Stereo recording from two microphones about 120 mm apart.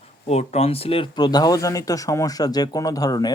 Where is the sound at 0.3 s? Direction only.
60° left (ahead or behind).